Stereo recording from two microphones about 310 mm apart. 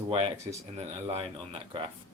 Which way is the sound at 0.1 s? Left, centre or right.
Centre.